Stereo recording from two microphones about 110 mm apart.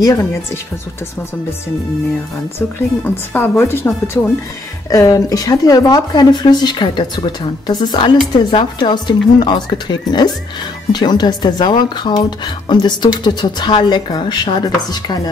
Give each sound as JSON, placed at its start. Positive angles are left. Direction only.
{"t": 0.0, "sound": "speech", "side_deg": 30}
{"t": 3.0, "sound": "speech", "side_deg": 20}
{"t": 4.8, "sound": "speech", "side_deg": 30}